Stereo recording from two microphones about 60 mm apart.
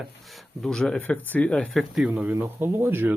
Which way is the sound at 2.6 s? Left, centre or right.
Right.